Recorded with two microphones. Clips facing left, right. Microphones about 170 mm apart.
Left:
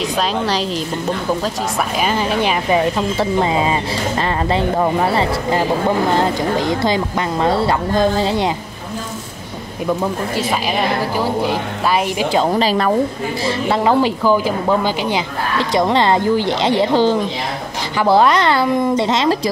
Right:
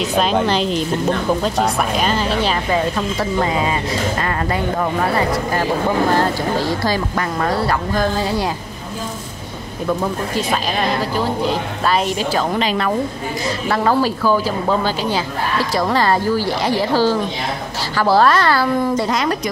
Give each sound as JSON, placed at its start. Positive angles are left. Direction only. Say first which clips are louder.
{"t": 0.0, "sound": "a woman's voice", "louder": "right 2 dB", "side_deg": 0}
{"t": 2.0, "sound": "a woman's voice", "louder": "left 1 dB", "side_deg": 15}
{"t": 3.2, "sound": "speech", "louder": "left 2 dB", "side_deg": 25}
{"t": 11.1, "sound": "a woman's voice", "louder": "left 1 dB", "side_deg": 10}
{"t": 12.4, "sound": "speech", "louder": "left 5 dB", "side_deg": 35}
{"t": 13.7, "sound": "a woman's voice", "louder": "left 1 dB", "side_deg": 20}